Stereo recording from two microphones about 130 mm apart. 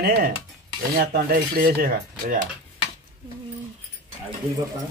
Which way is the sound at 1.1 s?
90° right.